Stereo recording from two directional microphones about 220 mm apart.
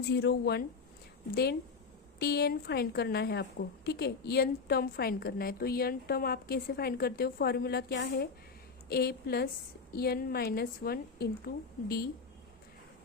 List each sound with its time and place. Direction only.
0.0 s a woman's voice: 50° left (ahead or behind)
2.1 s a woman's voice: 45° left (ahead or behind)